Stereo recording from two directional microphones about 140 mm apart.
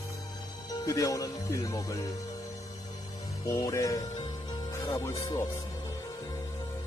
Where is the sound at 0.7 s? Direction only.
25° left (ahead or behind).